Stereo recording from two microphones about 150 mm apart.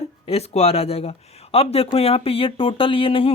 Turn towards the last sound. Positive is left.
turn(degrees=35)  # may be behind; listen again after turning